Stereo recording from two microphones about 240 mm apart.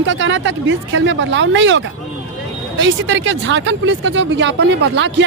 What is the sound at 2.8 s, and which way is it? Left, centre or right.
Speech, right.